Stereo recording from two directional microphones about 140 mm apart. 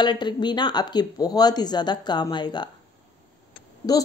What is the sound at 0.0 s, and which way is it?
Speech, 30° left (ahead or behind).